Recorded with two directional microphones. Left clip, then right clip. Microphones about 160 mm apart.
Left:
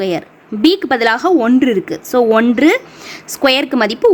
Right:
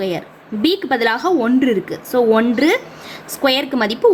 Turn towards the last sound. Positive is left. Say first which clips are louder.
# left 4 dB
turn(degrees=40)  # may be behind; listen again after turning